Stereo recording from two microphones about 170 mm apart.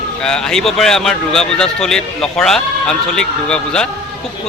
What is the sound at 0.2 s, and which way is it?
Speech, 5° left (ahead or behind).